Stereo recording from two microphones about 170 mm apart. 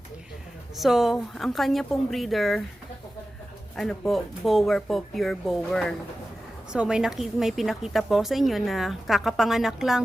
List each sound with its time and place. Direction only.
0.8 s speech: centre (ahead or behind)
3.8 s speech: centre (ahead or behind)